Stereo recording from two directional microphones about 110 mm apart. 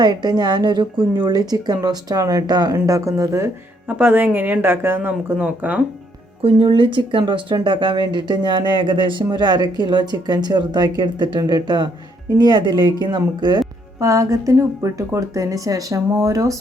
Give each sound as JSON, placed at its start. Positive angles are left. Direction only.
{"t": 0.0, "sound": "speech", "side_deg": -40}
{"t": 3.8, "sound": "speech", "side_deg": -15}
{"t": 6.4, "sound": "speech", "side_deg": -55}
{"t": 14.0, "sound": "speech", "side_deg": -30}